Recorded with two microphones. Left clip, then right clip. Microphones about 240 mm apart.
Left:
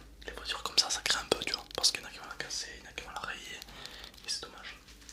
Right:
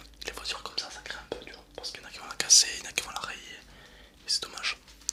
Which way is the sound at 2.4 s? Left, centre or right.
Right.